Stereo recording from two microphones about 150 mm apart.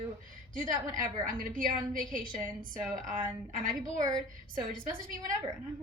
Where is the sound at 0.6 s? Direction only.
65° right (ahead or behind).